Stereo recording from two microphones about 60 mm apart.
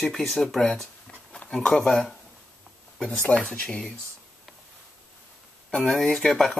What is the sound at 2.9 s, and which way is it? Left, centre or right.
Speech, centre.